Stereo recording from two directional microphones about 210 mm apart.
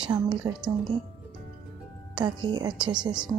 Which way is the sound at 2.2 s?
20° right (ahead or behind).